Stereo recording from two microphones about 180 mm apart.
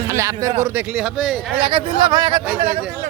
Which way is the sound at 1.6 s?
25° right (ahead or behind).